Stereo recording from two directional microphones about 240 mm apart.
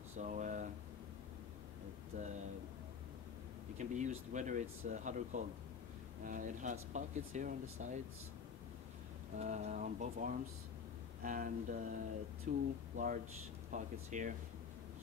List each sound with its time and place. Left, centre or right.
0.2 s speech: right
2.1 s speech: right
3.7 s speech: right
9.4 s speech: right